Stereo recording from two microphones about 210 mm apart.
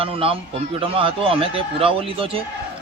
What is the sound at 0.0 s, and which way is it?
A man's voice, 25° right (ahead or behind).